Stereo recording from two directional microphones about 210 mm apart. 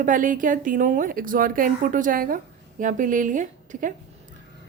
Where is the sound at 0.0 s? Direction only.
40° right (ahead or behind).